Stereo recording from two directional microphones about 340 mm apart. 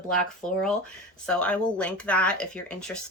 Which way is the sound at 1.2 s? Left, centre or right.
Centre.